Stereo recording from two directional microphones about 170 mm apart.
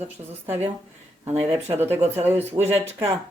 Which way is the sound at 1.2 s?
15° right (ahead or behind).